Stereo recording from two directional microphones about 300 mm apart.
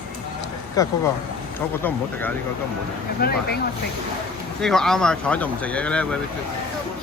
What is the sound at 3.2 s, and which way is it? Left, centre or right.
Speech, left.